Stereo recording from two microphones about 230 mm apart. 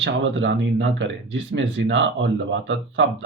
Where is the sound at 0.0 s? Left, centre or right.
Right.